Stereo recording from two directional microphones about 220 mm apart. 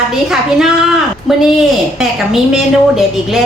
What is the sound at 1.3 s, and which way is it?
A woman's voice, centre (ahead or behind).